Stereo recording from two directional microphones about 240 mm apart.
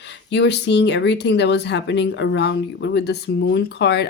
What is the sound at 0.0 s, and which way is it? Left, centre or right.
Speech, left.